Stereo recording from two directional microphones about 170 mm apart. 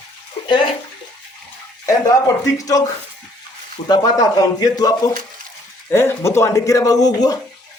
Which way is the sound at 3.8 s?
25° left (ahead or behind).